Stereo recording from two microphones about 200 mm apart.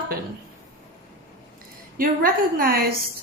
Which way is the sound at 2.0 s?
45° right (ahead or behind).